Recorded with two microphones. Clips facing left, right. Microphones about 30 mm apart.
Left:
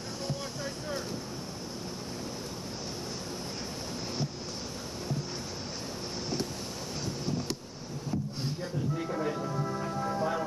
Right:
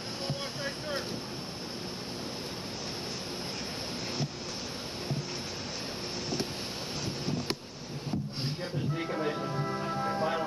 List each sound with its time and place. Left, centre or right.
7.2 s a sound: right
8.5 s music: right
9.1 s music: right